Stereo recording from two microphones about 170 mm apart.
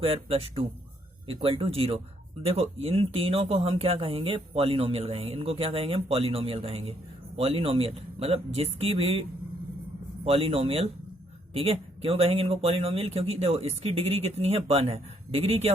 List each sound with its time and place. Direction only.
0.0 s speech: 35° right (ahead or behind)
10.2 s speech: 35° right (ahead or behind)